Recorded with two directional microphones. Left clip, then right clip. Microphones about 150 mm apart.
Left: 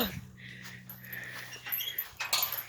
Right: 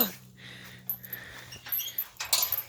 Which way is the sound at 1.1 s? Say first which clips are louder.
Left 3 dB; 40° right (ahead or behind).